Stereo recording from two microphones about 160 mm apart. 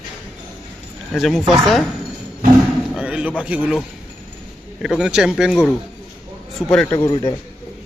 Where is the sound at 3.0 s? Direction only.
5° right (ahead or behind).